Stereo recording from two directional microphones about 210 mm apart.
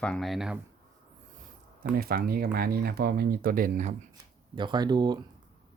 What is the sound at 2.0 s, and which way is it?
Speech, 45° right (ahead or behind).